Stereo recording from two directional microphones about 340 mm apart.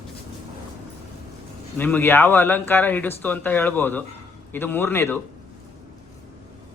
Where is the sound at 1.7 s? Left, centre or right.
Centre.